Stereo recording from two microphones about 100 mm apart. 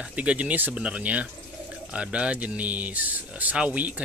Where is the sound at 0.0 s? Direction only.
10° right (ahead or behind).